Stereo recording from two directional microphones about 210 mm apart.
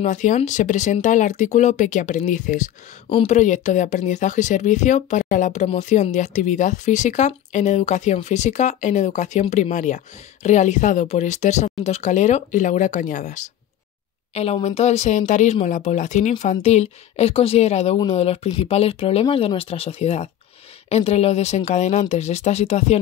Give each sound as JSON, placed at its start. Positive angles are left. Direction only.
{"t": 0.0, "sound": "speech", "side_deg": 35}